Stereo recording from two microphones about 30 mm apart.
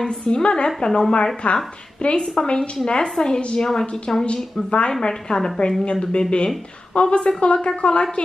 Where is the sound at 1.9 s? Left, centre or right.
Left.